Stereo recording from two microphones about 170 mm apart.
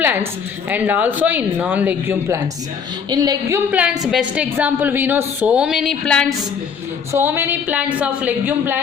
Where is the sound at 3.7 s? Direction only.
5° right (ahead or behind).